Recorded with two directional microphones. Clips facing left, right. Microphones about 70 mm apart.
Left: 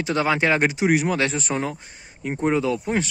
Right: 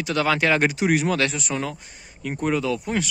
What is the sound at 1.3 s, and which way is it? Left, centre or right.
Speech, left.